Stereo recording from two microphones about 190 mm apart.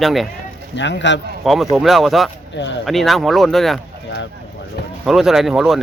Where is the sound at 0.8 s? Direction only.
70° left (ahead or behind).